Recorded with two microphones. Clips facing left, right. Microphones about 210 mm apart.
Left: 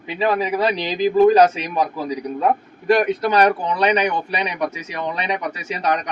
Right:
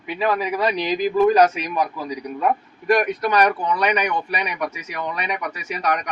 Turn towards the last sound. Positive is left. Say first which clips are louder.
# left 2 dB
turn(degrees=25)  # may be behind; listen again after turning